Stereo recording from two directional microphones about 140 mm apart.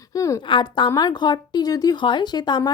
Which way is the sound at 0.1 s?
25° left (ahead or behind).